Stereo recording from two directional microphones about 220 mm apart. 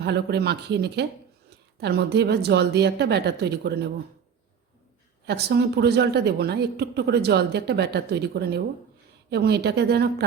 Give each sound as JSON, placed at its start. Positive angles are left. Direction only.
{"t": 0.0, "sound": "speech", "side_deg": -50}
{"t": 5.2, "sound": "speech", "side_deg": -50}